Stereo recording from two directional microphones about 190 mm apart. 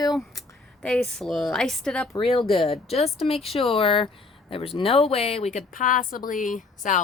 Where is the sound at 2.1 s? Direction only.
25° left (ahead or behind).